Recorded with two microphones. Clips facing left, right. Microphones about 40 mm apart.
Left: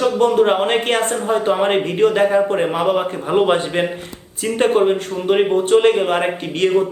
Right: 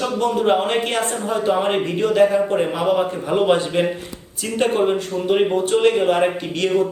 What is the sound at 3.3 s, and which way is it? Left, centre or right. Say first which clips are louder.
Speech: left 2 dB; centre.